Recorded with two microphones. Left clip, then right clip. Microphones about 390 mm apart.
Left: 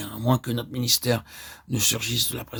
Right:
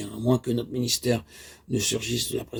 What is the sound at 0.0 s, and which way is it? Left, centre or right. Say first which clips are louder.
Speech: even; left.